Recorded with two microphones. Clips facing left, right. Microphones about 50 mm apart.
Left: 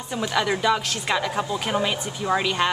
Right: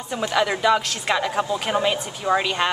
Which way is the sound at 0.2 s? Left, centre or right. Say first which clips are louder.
Right 2 dB; centre.